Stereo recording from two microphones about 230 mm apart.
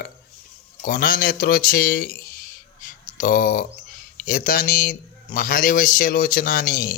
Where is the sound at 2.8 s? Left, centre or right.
Left.